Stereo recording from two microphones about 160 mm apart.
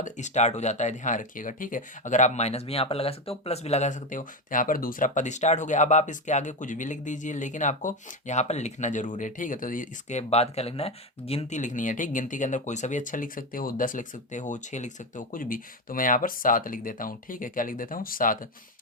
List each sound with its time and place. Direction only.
0.0 s speech: 45° left (ahead or behind)